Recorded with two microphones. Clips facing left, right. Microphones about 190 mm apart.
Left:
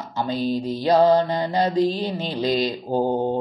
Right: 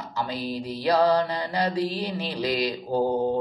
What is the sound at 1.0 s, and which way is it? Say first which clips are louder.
Speech: left 4 dB; 25° left (ahead or behind).